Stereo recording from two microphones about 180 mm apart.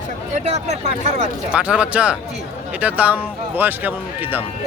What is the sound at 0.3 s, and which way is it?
Speech, 40° right (ahead or behind).